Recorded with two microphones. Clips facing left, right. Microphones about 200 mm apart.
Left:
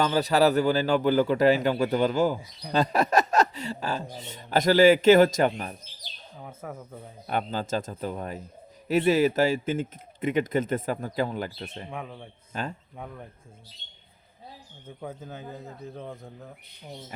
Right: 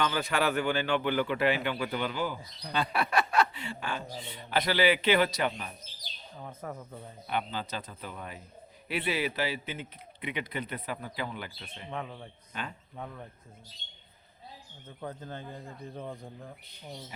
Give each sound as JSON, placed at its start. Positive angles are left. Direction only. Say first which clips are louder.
{"t": 0.0, "sound": "a man's voice", "louder": "left 7 dB", "side_deg": 35}
{"t": 6.3, "sound": "speech", "louder": "left 1 dB", "side_deg": 5}
{"t": 7.3, "sound": "speech", "louder": "left 5 dB", "side_deg": 45}
{"t": 11.9, "sound": "a man's voice", "louder": "left 1 dB", "side_deg": 5}
{"t": 12.5, "sound": "a man's voice", "louder": "left 6 dB", "side_deg": 40}
{"t": 13.0, "sound": "speech", "louder": "even", "side_deg": 10}
{"t": 14.8, "sound": "a man's voice", "louder": "left 2 dB", "side_deg": 10}